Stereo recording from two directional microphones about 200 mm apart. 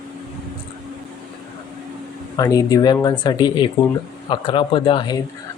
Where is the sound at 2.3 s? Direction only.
20° left (ahead or behind).